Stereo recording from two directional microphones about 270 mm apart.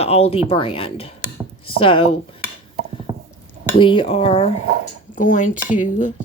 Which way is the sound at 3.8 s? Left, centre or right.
Centre.